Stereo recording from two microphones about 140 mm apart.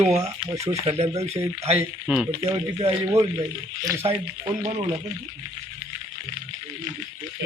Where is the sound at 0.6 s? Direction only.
50° right (ahead or behind).